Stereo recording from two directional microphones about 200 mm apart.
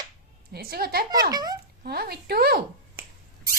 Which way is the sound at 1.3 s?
20° right (ahead or behind).